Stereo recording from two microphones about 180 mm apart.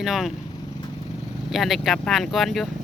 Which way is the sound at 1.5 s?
Centre (ahead or behind).